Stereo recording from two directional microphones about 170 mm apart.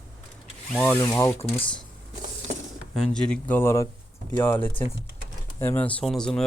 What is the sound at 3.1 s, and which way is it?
Speech, 5° left (ahead or behind).